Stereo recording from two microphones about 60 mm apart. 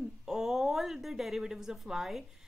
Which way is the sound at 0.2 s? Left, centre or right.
Centre.